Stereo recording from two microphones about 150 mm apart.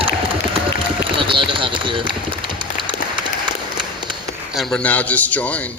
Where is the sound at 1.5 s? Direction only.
35° right (ahead or behind).